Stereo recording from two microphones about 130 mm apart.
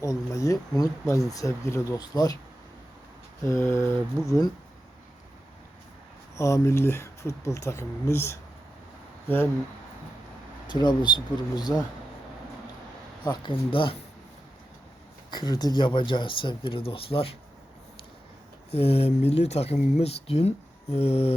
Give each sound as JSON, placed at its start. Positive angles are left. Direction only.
{"t": 0.0, "sound": "speech", "side_deg": 25}
{"t": 3.4, "sound": "speech", "side_deg": 20}
{"t": 6.3, "sound": "speech", "side_deg": 25}
{"t": 10.7, "sound": "speech", "side_deg": 35}
{"t": 13.2, "sound": "speech", "side_deg": 35}
{"t": 15.3, "sound": "speech", "side_deg": 35}
{"t": 18.7, "sound": "speech", "side_deg": 50}